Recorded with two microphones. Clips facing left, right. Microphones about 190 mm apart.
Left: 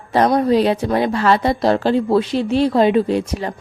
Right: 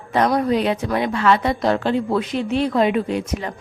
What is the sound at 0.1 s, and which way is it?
A woman's voice, 35° left (ahead or behind).